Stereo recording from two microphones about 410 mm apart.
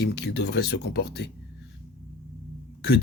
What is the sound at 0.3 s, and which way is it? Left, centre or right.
Speech, left.